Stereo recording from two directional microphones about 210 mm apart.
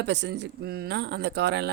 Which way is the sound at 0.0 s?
55° right (ahead or behind).